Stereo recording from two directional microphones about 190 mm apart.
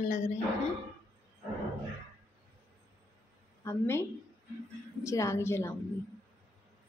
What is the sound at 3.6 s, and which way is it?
A woman's voice, 15° left (ahead or behind).